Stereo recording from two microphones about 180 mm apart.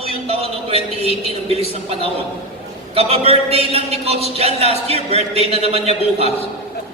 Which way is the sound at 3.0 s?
35° right (ahead or behind).